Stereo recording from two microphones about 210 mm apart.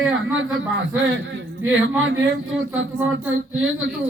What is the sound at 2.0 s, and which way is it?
A man's voice, 70° right (ahead or behind).